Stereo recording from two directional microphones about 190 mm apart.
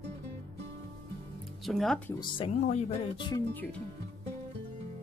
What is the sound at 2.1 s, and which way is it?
Speech, 25° left (ahead or behind).